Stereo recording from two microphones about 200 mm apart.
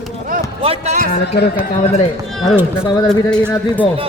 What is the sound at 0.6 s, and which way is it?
Speech, 30° right (ahead or behind).